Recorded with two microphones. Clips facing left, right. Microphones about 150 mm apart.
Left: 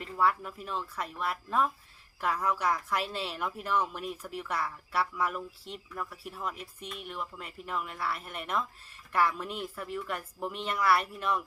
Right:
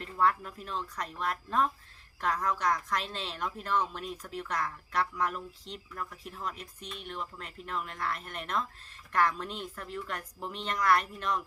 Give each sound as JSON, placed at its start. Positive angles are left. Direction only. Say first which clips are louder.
{"t": 0.0, "sound": "a woman's voice", "louder": "even", "side_deg": 5}